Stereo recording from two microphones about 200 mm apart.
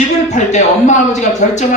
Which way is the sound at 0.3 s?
35° left (ahead or behind).